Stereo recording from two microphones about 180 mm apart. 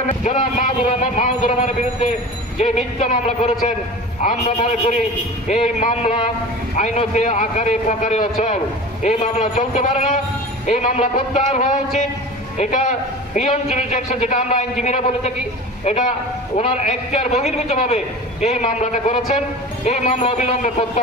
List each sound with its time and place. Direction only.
0.2 s a man's voice: 40° left (ahead or behind)